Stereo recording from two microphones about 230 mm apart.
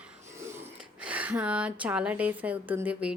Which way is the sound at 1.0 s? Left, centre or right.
Centre.